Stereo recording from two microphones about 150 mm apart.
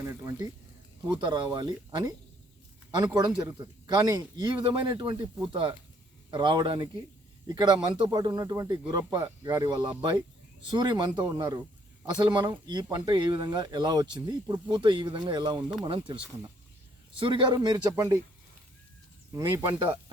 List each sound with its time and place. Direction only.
0.0 s speech: 15° right (ahead or behind)
3.2 s speech: 25° right (ahead or behind)
19.3 s speech: 15° right (ahead or behind)